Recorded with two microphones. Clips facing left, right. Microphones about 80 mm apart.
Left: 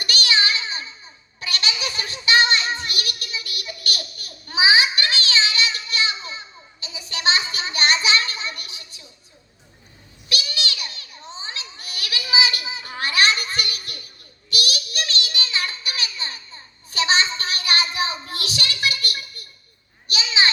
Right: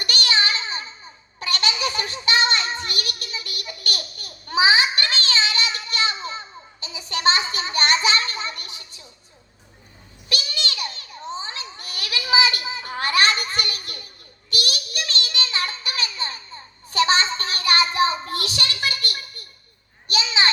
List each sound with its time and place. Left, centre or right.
0.0 s child singing: right
1.4 s a sound: right
10.2 s children playing: right
15.1 s child singing: right